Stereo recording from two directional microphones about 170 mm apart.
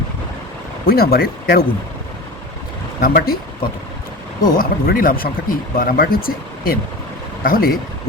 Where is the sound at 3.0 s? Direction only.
60° left (ahead or behind).